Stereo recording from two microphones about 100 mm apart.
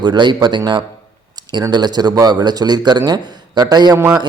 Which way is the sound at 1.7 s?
45° right (ahead or behind).